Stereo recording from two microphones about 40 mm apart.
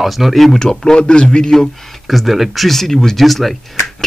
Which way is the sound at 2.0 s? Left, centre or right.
Centre.